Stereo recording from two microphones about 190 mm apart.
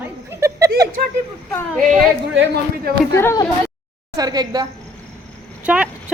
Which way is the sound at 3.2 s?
15° left (ahead or behind).